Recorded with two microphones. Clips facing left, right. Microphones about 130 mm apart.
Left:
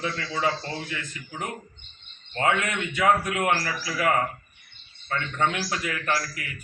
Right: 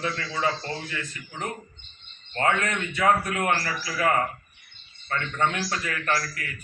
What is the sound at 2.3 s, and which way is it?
A man's voice, 15° left (ahead or behind).